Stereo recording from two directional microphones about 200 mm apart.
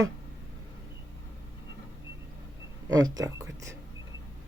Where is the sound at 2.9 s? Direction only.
20° right (ahead or behind).